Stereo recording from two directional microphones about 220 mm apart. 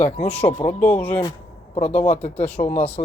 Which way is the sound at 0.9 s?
5° left (ahead or behind).